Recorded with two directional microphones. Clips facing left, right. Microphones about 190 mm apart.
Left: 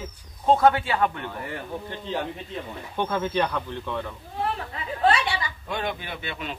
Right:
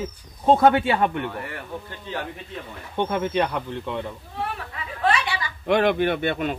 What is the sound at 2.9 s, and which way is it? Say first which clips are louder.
Speech: right 2 dB; 25° right (ahead or behind).